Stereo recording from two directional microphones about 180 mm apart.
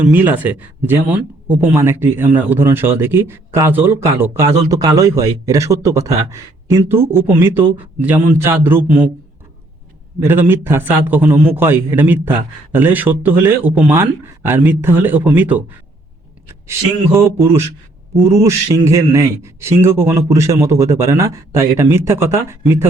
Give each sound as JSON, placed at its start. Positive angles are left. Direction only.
{"t": 0.0, "sound": "speech", "side_deg": -10}
{"t": 10.2, "sound": "speech", "side_deg": -10}
{"t": 17.2, "sound": "speech", "side_deg": -15}